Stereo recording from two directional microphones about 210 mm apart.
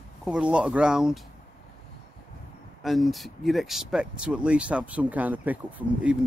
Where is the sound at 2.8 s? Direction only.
Centre (ahead or behind).